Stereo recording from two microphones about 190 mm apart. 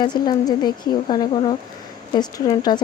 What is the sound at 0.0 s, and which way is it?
Speech, 25° left (ahead or behind).